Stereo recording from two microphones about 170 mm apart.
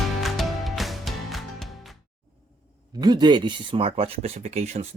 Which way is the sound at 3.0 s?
25° right (ahead or behind).